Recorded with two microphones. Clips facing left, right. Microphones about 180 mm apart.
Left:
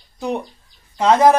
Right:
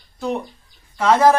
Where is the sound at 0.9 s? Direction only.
20° left (ahead or behind).